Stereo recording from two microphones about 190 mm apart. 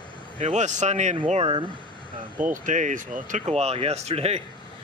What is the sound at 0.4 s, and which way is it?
Speech, 40° right (ahead or behind).